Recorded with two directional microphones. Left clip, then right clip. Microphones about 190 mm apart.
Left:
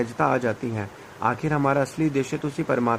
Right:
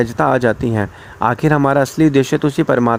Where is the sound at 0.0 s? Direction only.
45° right (ahead or behind).